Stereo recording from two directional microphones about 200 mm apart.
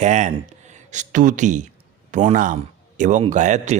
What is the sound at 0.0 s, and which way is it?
Speech, 35° right (ahead or behind).